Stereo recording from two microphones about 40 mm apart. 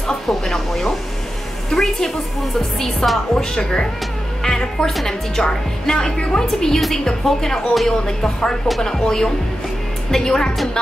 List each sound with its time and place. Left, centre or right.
0.0 s a woman's voice: centre
3.0 s a woman's voice: centre
4.4 s music: centre
5.0 s a woman's voice: centre
7.7 s a woman's voice: centre